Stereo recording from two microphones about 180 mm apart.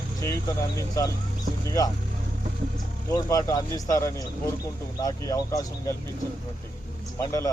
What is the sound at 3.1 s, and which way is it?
Speech, 20° left (ahead or behind).